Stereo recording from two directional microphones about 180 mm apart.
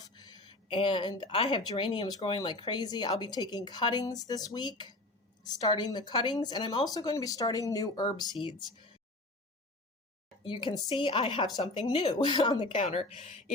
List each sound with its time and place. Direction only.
0.0 s a sound: 20° left (ahead or behind)
1.4 s speech: 25° left (ahead or behind)
10.4 s speech: 25° left (ahead or behind)
12.8 s speech: 40° left (ahead or behind)